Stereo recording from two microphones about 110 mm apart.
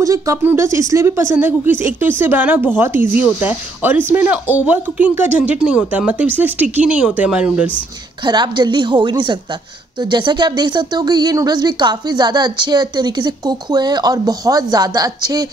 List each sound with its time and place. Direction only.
0.0 s speech: 30° right (ahead or behind); by 7.6 s 10° right (ahead or behind)
8.3 s a woman's voice: 45° right (ahead or behind)